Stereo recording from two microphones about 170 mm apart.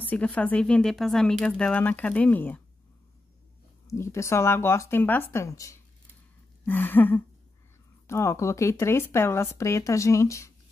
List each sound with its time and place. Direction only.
0.0 s speech: 10° left (ahead or behind)
3.8 s speech: 15° left (ahead or behind)